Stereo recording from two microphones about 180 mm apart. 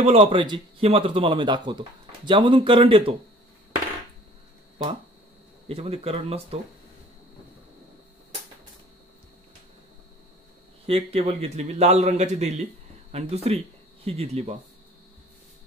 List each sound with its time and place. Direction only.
0.0 s speech: 30° right (ahead or behind)
5.7 s a man's voice: 35° right (ahead or behind)
10.9 s a man's voice: 35° right (ahead or behind)